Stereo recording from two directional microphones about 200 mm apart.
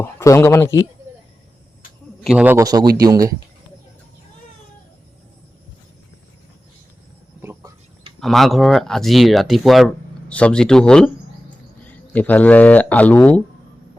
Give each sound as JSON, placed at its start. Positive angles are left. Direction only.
{"t": 0.0, "sound": "speech", "side_deg": 15}
{"t": 2.2, "sound": "a man's voice", "side_deg": -5}
{"t": 2.8, "sound": "speech", "side_deg": -50}
{"t": 7.4, "sound": "a sound", "side_deg": -15}
{"t": 8.2, "sound": "speech", "side_deg": 0}